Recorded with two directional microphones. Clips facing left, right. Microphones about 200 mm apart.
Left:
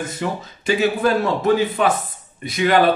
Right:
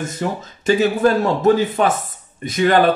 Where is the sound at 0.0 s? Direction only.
45° right (ahead or behind).